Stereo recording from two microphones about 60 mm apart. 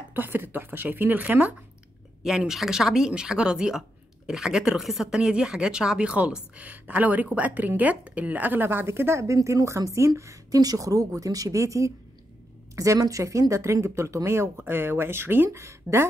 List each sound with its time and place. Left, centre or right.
0.1 s speech: right
2.2 s a woman's voice: centre; by 9.2 s right
9.3 s speech: right
14.6 s speech: right